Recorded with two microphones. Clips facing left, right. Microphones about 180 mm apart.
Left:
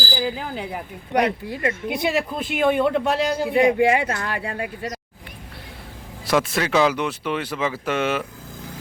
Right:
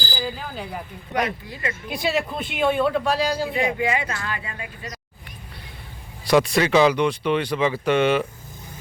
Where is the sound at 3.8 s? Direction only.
60° left (ahead or behind).